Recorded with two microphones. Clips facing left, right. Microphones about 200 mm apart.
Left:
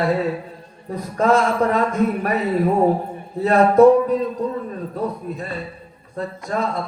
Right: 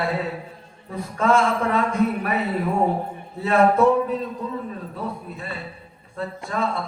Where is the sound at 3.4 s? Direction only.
40° left (ahead or behind).